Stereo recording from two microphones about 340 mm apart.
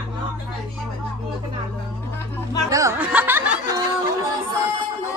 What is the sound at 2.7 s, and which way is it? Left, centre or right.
Music, centre.